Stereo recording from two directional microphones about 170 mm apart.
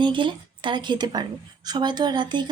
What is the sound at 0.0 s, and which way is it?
A woman's voice, 30° right (ahead or behind).